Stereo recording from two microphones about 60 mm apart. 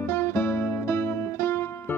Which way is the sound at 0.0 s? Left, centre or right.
Left.